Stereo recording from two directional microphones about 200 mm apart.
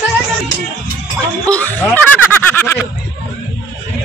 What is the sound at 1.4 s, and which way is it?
Snicker, 5° left (ahead or behind).